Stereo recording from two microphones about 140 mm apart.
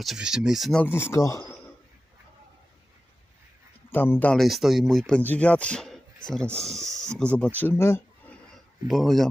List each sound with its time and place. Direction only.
0.0 s speech: 5° right (ahead or behind)
0.8 s speech: 15° left (ahead or behind)
3.9 s speech: 15° left (ahead or behind)
4.4 s speech: centre (ahead or behind); by 8.4 s 15° left (ahead or behind)
8.5 s speech: centre (ahead or behind)